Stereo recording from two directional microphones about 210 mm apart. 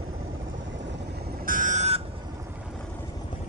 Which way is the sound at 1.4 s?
40° right (ahead or behind).